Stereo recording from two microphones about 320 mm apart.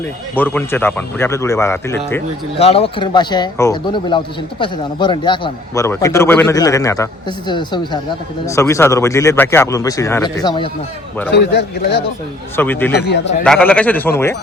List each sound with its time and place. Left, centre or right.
0.3 s a man's voice: centre
2.6 s a man's voice: centre
11.3 s speech: left
12.5 s a man's voice: centre
12.9 s speech: left
13.4 s a man's voice: centre